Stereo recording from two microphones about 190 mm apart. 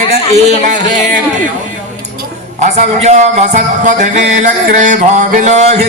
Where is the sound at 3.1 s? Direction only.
40° right (ahead or behind).